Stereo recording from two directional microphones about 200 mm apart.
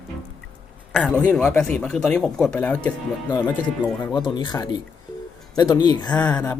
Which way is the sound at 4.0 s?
20° left (ahead or behind).